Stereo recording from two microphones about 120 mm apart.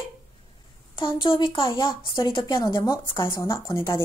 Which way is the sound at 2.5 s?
25° left (ahead or behind).